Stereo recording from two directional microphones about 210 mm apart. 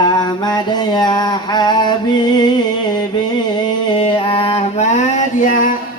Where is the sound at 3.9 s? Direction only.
25° left (ahead or behind).